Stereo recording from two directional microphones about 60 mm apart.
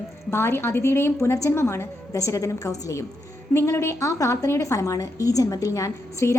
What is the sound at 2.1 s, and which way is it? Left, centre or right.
Speech, left.